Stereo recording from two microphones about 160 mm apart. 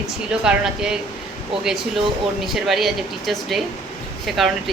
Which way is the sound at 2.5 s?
Centre (ahead or behind).